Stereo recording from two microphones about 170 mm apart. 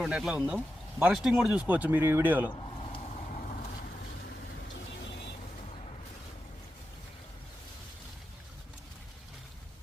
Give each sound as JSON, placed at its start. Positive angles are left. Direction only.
{"t": 0.0, "sound": "speech", "side_deg": -5}
{"t": 2.6, "sound": "vehicle", "side_deg": 35}